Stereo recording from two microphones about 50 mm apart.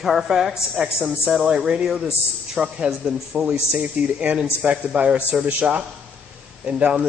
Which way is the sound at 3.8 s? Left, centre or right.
Right.